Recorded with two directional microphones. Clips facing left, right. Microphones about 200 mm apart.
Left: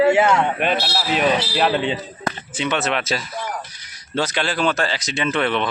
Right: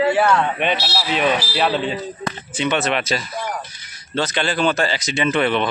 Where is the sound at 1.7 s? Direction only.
15° left (ahead or behind).